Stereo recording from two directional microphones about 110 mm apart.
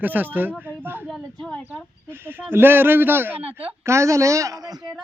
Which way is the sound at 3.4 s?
65° right (ahead or behind).